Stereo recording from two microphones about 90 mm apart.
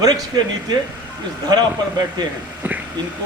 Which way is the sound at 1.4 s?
50° right (ahead or behind).